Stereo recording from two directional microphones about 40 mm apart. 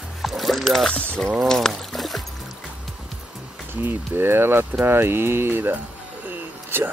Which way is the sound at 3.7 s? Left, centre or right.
Right.